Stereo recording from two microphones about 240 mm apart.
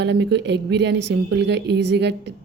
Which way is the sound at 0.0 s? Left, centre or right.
Right.